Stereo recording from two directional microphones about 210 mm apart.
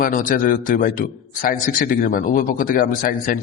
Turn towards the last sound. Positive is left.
turn(degrees=40)  # may be behind; listen again after turning